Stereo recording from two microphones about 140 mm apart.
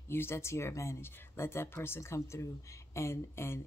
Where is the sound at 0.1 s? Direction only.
15° left (ahead or behind).